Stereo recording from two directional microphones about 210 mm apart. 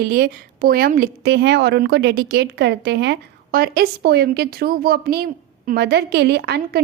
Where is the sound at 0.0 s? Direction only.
45° right (ahead or behind).